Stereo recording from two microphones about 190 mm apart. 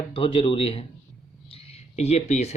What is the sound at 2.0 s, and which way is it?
Speech, 35° left (ahead or behind).